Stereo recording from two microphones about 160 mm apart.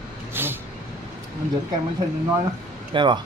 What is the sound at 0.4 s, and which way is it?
Vehicle, 15° right (ahead or behind).